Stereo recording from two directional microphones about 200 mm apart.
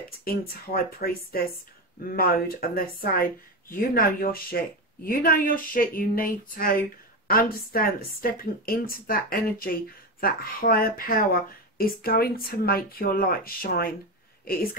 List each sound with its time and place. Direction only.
0.9 s a woman's voice: 50° left (ahead or behind)